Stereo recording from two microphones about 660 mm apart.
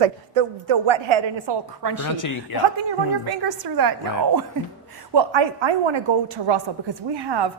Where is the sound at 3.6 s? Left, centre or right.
Right.